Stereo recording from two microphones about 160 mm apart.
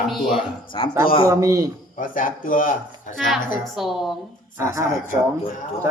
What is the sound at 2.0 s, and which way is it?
Speech, 60° left (ahead or behind).